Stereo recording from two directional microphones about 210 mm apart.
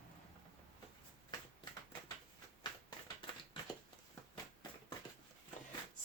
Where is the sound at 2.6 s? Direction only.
20° left (ahead or behind).